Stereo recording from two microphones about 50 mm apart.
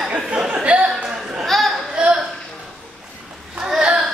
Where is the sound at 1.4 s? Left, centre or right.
Centre.